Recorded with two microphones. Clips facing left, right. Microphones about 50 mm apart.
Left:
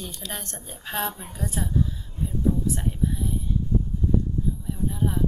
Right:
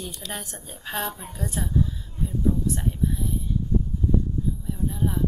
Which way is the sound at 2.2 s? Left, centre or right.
Centre.